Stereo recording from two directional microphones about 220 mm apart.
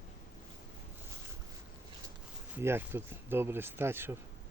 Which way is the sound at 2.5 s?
10° right (ahead or behind).